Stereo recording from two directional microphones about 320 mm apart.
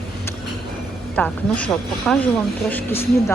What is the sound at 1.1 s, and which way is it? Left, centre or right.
Speech, centre.